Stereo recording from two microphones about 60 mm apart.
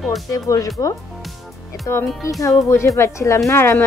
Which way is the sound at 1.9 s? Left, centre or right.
Left.